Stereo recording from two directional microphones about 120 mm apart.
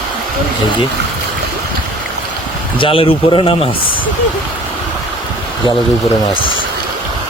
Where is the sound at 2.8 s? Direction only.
50° left (ahead or behind).